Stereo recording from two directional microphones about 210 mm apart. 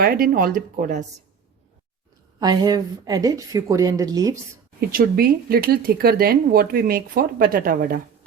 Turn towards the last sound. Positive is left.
turn(degrees=-45)  # may be behind; listen again after turning